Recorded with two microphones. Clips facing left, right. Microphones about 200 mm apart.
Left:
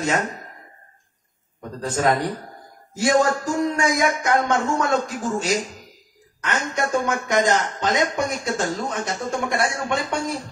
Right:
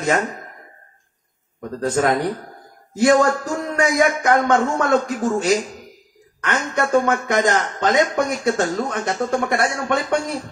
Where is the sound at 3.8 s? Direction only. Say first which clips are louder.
Right 4 dB; 55° right (ahead or behind).